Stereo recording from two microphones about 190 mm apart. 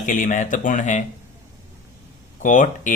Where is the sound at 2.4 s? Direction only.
40° left (ahead or behind).